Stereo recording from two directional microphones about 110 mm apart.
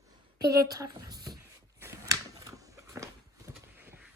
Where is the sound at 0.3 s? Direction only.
35° right (ahead or behind).